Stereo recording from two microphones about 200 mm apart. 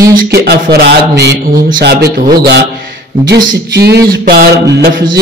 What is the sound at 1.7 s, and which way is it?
Speech, 45° right (ahead or behind).